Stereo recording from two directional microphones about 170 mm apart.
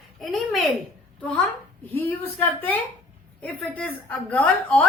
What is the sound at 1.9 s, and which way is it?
A woman's voice, 10° left (ahead or behind).